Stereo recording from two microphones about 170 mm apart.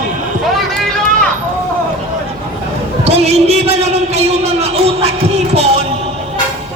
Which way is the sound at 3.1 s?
40° right (ahead or behind).